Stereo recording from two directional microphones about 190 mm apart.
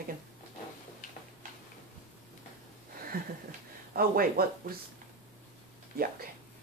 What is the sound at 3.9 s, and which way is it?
Speech, 50° right (ahead or behind).